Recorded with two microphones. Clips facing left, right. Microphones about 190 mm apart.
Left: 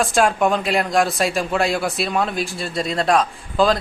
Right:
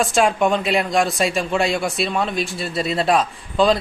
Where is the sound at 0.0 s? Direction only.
Centre (ahead or behind).